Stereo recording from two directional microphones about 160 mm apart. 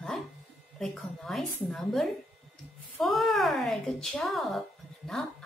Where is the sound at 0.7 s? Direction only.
Centre (ahead or behind).